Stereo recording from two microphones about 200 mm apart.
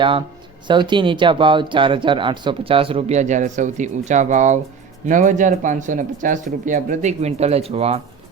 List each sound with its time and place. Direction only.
0.0 s speech: 25° right (ahead or behind)